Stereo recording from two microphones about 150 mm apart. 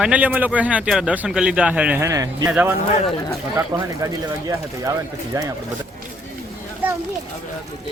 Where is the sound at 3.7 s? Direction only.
25° right (ahead or behind).